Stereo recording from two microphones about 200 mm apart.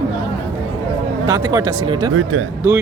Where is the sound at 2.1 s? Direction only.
85° right.